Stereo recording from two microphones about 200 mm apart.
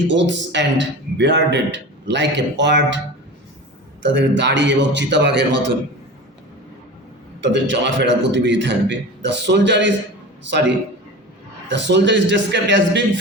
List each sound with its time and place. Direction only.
0.1 s a man's voice: 65° right (ahead or behind)
4.0 s a man's voice: 60° right (ahead or behind)
7.4 s a man's voice: 65° right (ahead or behind)
11.7 s a man's voice: 60° right (ahead or behind)